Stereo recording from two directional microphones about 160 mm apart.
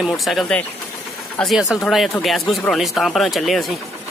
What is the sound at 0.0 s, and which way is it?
Speech, centre (ahead or behind).